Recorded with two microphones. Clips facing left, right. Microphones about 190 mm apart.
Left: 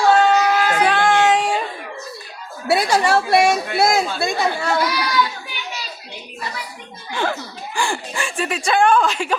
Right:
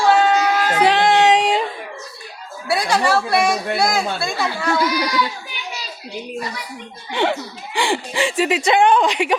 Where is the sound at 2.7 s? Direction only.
25° left (ahead or behind).